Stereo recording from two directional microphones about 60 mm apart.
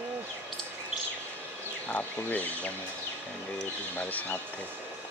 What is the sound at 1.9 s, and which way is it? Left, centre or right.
Speech, left.